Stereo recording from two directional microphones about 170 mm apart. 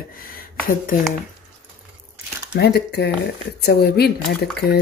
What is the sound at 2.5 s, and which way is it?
Speech, 75° left (ahead or behind).